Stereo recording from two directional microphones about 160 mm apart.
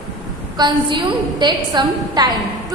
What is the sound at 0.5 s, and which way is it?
A woman's voice, 30° right (ahead or behind).